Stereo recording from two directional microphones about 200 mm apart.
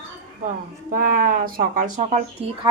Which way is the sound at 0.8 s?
45° right (ahead or behind).